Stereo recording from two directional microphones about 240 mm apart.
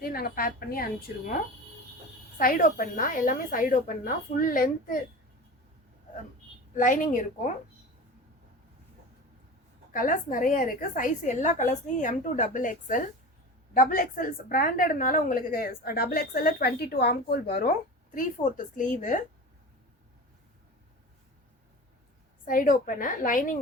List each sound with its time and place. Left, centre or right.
0.0 s a woman's voice: left
2.4 s a woman's voice: left
6.7 s a woman's voice: left
9.9 s a woman's voice: left
22.4 s a woman's voice: left